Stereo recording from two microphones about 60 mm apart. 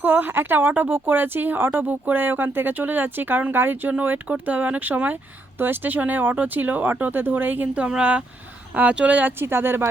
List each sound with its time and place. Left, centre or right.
0.0 s speech: right
7.7 s speech: centre
9.4 s speech: right